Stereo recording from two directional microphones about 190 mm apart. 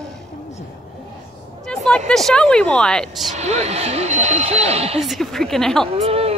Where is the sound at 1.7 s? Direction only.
5° left (ahead or behind).